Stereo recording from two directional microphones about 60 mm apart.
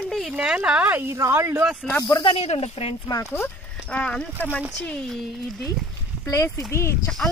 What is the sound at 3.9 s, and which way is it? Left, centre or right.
Speech, centre.